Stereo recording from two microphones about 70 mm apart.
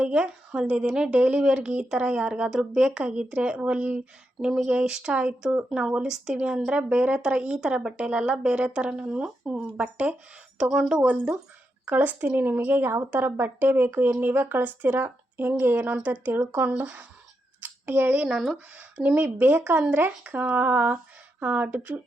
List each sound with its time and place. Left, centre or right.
0.0 s a woman's voice: centre
11.0 s a woman's voice: right
16.0 s a woman's voice: centre